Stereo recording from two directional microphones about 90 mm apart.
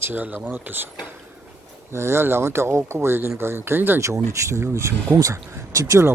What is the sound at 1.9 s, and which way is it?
Speech, 30° right (ahead or behind).